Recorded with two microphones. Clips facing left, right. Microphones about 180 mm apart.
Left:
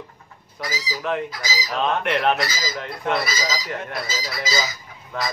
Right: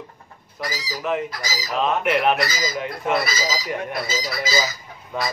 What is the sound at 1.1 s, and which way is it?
Speech, 5° right (ahead or behind).